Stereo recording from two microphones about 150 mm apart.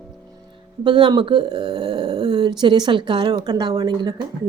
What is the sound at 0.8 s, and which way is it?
Speech, 30° right (ahead or behind).